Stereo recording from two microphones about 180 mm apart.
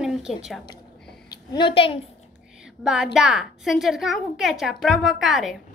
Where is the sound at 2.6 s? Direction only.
5° right (ahead or behind).